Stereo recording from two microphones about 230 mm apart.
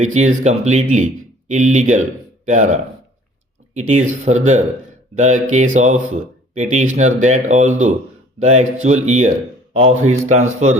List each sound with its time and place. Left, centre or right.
0.0 s speech: right